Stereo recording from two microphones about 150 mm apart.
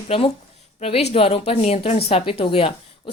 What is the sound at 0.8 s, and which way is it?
Speech, 40° left (ahead or behind).